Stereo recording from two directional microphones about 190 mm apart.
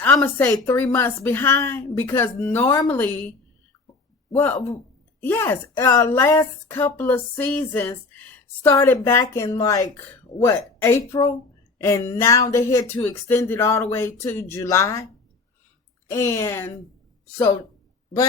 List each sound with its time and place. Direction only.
0.0 s a woman's voice: 10° left (ahead or behind)
16.0 s a woman's voice: 15° left (ahead or behind)